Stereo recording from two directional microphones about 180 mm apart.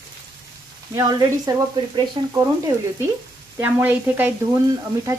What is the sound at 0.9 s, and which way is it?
Frying, 15° right (ahead or behind).